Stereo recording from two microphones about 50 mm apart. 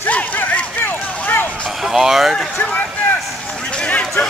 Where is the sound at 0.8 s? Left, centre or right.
Left.